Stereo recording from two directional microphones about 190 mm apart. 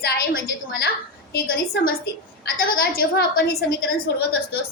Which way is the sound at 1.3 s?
55° left (ahead or behind).